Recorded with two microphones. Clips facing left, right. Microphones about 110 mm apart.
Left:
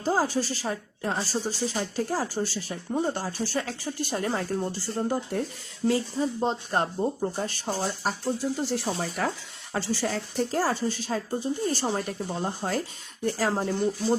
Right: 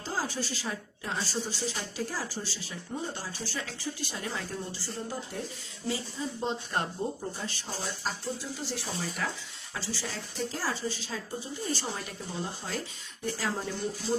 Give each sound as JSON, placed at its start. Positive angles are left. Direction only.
{"t": 0.0, "sound": "speech", "side_deg": 50}
{"t": 5.9, "sound": "speech", "side_deg": 45}
{"t": 7.3, "sound": "speech", "side_deg": 50}